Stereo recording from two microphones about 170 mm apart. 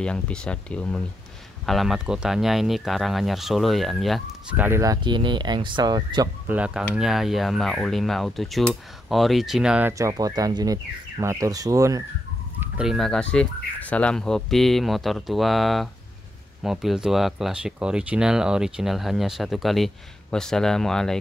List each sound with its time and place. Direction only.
0.0 s speech: 5° left (ahead or behind)
4.6 s speech: 15° right (ahead or behind)
5.0 s speech: 25° right (ahead or behind)
6.4 s speech: 10° right (ahead or behind)
12.5 s speech: 5° right (ahead or behind)